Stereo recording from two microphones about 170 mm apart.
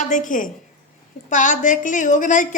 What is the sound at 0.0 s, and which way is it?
A woman's voice, 45° left (ahead or behind).